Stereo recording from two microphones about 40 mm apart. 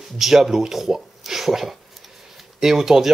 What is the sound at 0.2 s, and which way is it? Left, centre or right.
Speech, centre.